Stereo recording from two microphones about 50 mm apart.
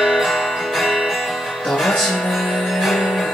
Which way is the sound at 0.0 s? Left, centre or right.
Centre.